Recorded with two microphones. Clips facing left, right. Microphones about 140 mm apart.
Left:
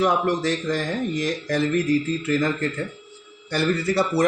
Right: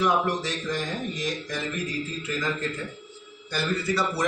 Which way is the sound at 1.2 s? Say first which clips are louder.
Left 7 dB; 65° left (ahead or behind).